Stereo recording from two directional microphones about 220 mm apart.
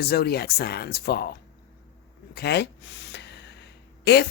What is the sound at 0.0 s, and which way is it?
Speech, 45° left (ahead or behind).